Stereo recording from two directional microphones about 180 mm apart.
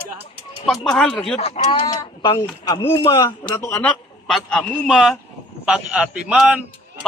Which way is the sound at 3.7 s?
10° left (ahead or behind).